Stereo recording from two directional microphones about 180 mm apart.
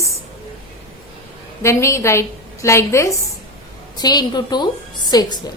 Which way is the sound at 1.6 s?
15° left (ahead or behind).